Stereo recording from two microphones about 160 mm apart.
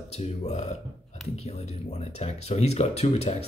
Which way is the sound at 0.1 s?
45° left (ahead or behind).